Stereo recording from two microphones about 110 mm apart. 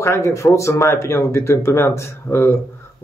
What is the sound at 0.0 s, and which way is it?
Speech, 25° left (ahead or behind).